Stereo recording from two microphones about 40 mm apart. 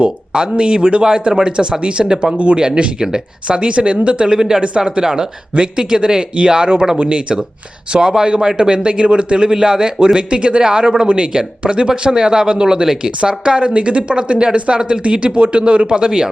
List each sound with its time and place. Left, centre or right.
0.0 s a man's voice: right